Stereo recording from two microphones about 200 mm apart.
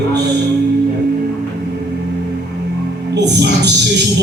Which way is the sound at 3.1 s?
60° right (ahead or behind).